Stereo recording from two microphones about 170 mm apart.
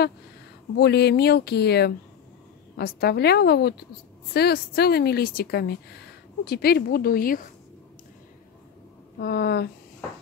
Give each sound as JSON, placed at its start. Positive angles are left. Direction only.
{"t": 0.7, "sound": "a woman's voice", "side_deg": 75}
{"t": 9.2, "sound": "a woman's voice", "side_deg": 70}